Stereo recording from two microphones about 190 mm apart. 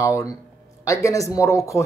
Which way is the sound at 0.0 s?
15° left (ahead or behind).